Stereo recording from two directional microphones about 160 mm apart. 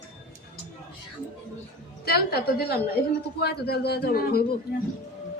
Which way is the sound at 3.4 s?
90° left.